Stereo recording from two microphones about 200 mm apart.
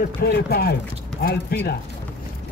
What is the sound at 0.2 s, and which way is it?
Speech, 50° left (ahead or behind).